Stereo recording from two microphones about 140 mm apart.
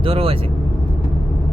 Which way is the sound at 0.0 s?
40° right (ahead or behind).